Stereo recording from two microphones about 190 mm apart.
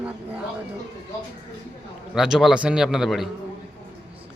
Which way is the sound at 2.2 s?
Centre (ahead or behind).